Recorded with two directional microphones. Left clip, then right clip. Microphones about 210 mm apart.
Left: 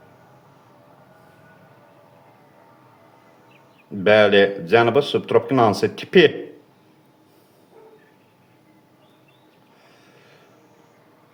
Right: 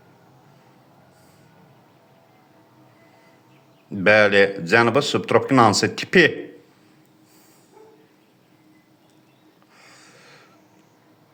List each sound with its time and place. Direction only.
4.0 s speech: 35° right (ahead or behind)
9.8 s snort: 35° right (ahead or behind)